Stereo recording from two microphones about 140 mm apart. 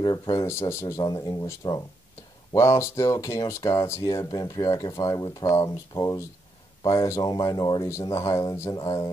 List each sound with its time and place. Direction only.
0.0 s speech: 30° left (ahead or behind)